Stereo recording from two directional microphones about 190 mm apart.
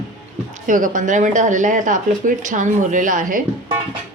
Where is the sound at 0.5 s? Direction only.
45° right (ahead or behind).